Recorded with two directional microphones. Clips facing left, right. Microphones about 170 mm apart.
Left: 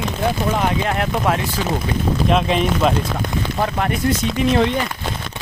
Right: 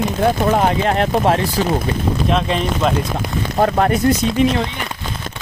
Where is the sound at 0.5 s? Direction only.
35° right (ahead or behind).